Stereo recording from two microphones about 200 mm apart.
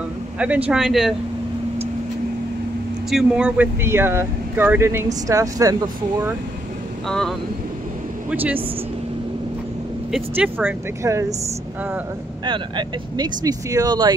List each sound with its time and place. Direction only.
0.7 s speech: centre (ahead or behind)
3.1 s speech: 5° right (ahead or behind)
7.1 s speech: 5° left (ahead or behind)
10.1 s speech: 5° right (ahead or behind)
12.4 s speech: 20° right (ahead or behind)